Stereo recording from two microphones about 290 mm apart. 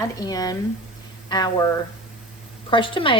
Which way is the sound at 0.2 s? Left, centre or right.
Centre.